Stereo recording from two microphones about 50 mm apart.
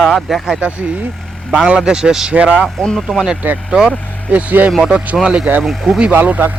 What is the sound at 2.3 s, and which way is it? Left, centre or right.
Speech, right.